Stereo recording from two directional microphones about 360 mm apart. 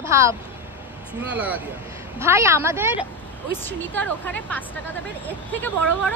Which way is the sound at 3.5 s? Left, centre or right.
Centre.